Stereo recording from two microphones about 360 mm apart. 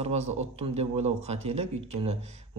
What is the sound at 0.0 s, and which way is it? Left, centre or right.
Speech, centre.